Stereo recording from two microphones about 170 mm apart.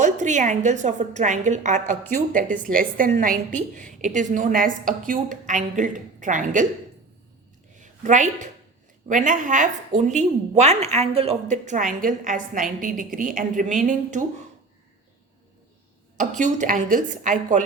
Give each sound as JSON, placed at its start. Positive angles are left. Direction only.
{"t": 0.0, "sound": "a woman's voice", "side_deg": -45}
{"t": 7.8, "sound": "a woman's voice", "side_deg": -45}
{"t": 16.1, "sound": "a woman's voice", "side_deg": -45}